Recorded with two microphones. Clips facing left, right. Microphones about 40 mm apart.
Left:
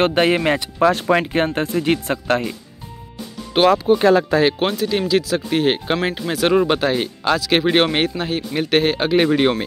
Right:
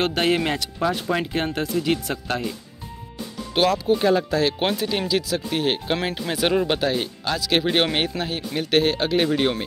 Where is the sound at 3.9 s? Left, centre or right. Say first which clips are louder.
Left 5 dB; left.